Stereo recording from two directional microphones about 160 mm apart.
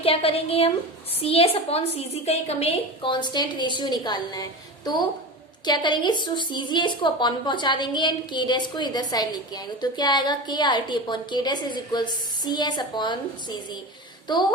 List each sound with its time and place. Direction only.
0.0 s a woman's voice: 35° left (ahead or behind)
5.6 s a woman's voice: 25° left (ahead or behind)